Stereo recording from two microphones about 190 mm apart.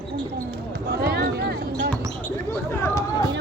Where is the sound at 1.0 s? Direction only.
55° right (ahead or behind).